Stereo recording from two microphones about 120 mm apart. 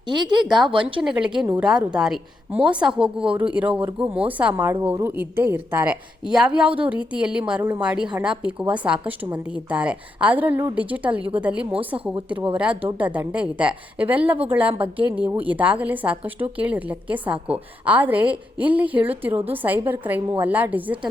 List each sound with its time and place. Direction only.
0.1 s speech: 40° right (ahead or behind)
0.4 s a woman's voice: centre (ahead or behind)
0.7 s speech: 45° right (ahead or behind)
1.0 s a woman's voice: 5° right (ahead or behind)